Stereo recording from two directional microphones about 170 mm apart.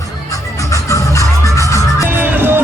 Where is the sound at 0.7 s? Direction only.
20° left (ahead or behind).